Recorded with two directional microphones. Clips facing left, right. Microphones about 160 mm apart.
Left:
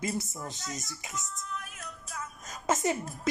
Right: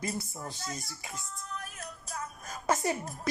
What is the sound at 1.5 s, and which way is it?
Music, 40° right (ahead or behind).